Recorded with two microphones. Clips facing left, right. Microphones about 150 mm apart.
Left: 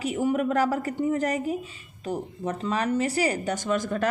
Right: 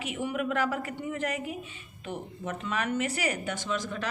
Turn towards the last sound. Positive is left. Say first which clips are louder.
# left 7 dB
turn(degrees=50)  # may be behind; listen again after turning